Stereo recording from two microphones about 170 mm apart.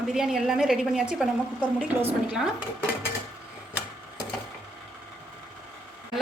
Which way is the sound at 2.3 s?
5° right (ahead or behind).